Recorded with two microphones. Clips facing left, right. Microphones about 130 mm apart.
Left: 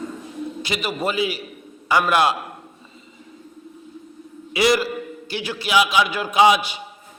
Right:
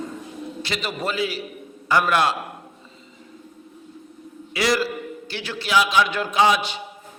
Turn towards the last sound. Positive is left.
turn(degrees=10)  # may be behind; listen again after turning